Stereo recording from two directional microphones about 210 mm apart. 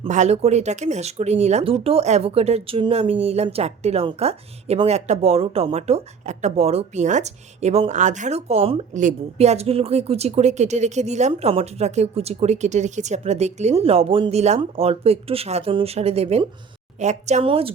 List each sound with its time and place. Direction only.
0.0 s speech: 35° right (ahead or behind)